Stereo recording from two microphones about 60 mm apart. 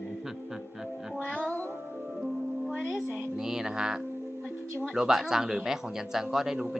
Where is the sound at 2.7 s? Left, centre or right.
Right.